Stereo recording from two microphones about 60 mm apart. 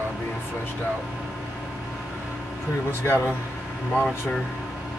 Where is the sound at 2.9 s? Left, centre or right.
Left.